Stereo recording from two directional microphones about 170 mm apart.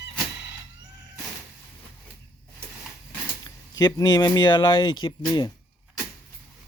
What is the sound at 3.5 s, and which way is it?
Speech, 20° left (ahead or behind).